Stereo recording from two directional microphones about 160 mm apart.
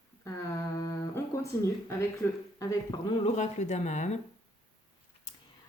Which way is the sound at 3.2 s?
45° left (ahead or behind).